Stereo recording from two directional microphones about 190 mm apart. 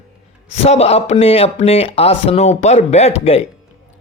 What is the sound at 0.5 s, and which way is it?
Speech, 35° left (ahead or behind).